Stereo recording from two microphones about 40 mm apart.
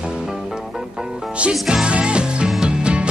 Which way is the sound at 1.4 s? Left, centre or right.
Right.